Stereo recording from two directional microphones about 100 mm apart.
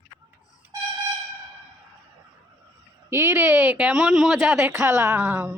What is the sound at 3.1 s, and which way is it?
A woman's voice, 25° right (ahead or behind).